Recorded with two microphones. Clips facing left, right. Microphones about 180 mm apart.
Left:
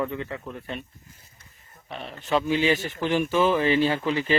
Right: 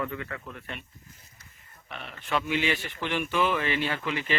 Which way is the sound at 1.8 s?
30° left (ahead or behind).